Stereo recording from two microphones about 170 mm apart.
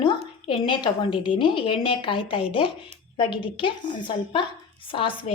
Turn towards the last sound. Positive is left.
turn(degrees=30)  # may be behind; listen again after turning